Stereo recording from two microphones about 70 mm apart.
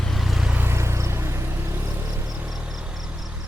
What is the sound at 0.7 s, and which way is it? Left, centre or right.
Vehicle, right.